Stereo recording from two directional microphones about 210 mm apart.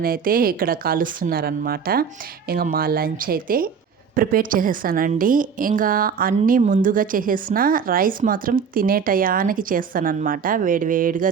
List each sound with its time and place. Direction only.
0.0 s a woman's voice: 45° right (ahead or behind)